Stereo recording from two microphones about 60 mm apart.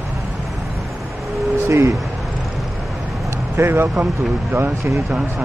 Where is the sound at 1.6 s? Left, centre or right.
Right.